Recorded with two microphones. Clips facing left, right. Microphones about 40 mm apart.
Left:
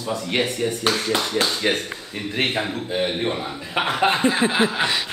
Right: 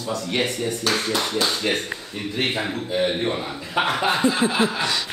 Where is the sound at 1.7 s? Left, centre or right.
Left.